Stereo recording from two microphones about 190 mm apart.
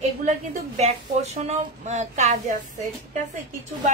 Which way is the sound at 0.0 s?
40° right (ahead or behind).